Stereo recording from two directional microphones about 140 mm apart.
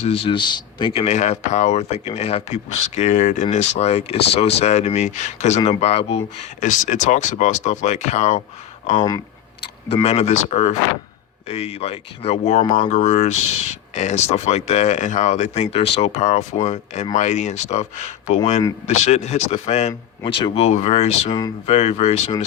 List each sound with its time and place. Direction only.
0.0 s speech: 45° left (ahead or behind)
1.0 s speech: 50° left (ahead or behind)
9.0 s speech: 25° left (ahead or behind)
9.9 s speech: 50° left (ahead or behind)
20.2 s speech: 35° left (ahead or behind)